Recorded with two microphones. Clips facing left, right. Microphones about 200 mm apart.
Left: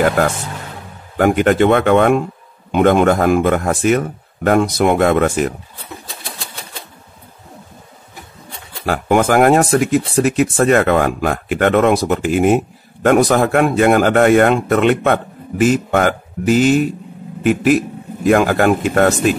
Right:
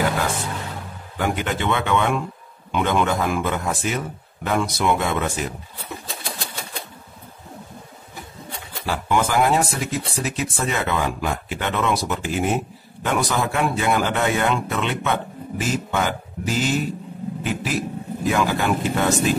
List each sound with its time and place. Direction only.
0.0 s speech: 60° left (ahead or behind)
8.8 s speech: 55° left (ahead or behind)